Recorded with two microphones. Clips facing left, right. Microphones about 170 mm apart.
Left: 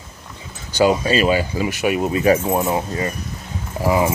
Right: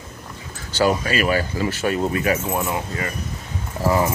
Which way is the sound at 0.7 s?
20° left (ahead or behind).